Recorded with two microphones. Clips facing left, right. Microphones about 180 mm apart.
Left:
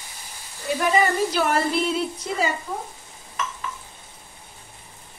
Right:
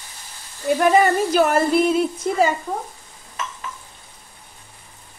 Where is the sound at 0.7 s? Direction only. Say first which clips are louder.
Right 5 dB; 45° right (ahead or behind).